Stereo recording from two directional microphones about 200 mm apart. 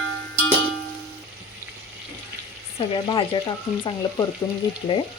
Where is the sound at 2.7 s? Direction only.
25° left (ahead or behind).